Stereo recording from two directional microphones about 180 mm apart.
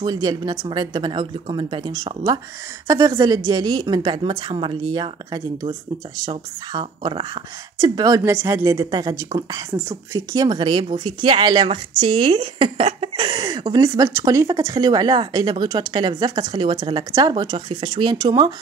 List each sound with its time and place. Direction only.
0.0 s a woman's voice: 20° right (ahead or behind)